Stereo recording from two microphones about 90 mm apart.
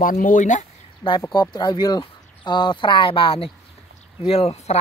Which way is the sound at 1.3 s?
55° left (ahead or behind).